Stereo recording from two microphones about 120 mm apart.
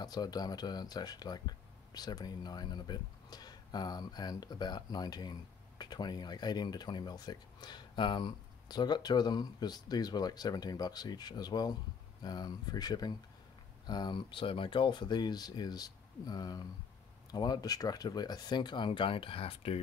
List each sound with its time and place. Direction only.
0.0 s speech: 35° left (ahead or behind); by 19.8 s 55° left (ahead or behind)